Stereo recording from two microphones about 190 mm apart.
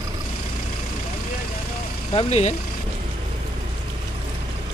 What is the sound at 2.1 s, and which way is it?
Speech, 30° left (ahead or behind).